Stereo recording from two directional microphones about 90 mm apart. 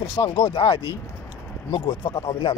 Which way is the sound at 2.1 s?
55° left (ahead or behind).